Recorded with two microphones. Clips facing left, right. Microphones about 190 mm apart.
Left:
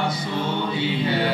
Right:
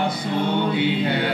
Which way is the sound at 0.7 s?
60° right (ahead or behind).